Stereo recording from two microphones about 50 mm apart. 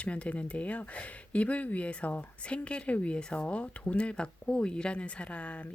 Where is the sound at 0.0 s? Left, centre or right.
Left.